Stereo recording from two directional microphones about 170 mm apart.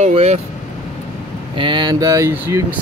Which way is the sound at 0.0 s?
40° right (ahead or behind).